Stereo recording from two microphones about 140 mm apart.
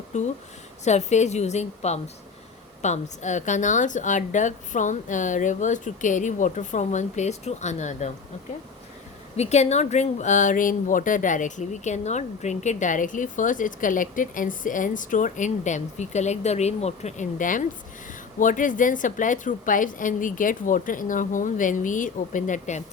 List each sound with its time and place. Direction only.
0.1 s a woman's voice: 55° left (ahead or behind)
9.4 s a woman's voice: 50° left (ahead or behind)